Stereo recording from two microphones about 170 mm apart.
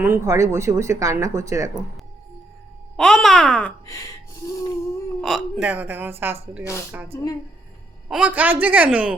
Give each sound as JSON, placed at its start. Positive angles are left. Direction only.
{"t": 0.0, "sound": "speech", "side_deg": -15}
{"t": 2.9, "sound": "a child's voice", "side_deg": 5}
{"t": 3.8, "sound": "speech", "side_deg": 15}
{"t": 5.2, "sound": "speech", "side_deg": 0}
{"t": 7.1, "sound": "speech", "side_deg": 15}
{"t": 8.1, "sound": "speech", "side_deg": -10}